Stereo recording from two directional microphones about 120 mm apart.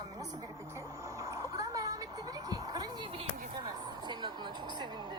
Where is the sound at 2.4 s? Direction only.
35° right (ahead or behind).